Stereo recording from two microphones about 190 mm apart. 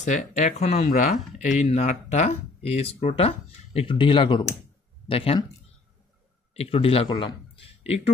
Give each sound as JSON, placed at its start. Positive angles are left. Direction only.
{"t": 0.0, "sound": "speech", "side_deg": 40}
{"t": 6.5, "sound": "speech", "side_deg": 30}